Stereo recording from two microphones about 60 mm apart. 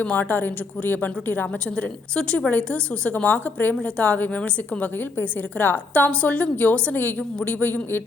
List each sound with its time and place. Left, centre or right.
0.0 s a woman's voice: left
2.1 s a woman's voice: centre
3.8 s a woman's voice: centre; by 8.0 s left